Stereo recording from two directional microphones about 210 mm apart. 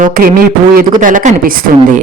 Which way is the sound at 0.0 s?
45° right (ahead or behind).